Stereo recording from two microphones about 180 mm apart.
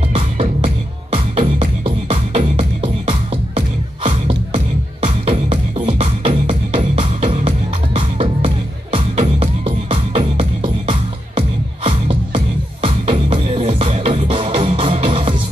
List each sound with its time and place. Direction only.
0.1 s music: 30° right (ahead or behind)
5.0 s music: 30° right (ahead or behind)